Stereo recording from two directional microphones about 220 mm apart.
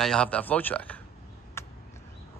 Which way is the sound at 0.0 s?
5° left (ahead or behind).